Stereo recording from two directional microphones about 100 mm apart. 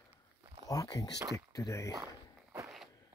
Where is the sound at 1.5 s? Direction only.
35° left (ahead or behind).